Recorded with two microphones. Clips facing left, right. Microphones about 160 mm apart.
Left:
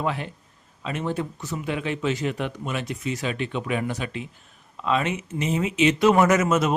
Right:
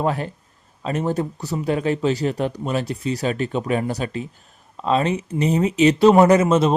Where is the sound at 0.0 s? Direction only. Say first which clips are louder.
Right 5 dB; 40° right (ahead or behind).